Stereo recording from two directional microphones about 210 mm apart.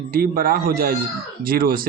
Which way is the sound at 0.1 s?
45° right (ahead or behind).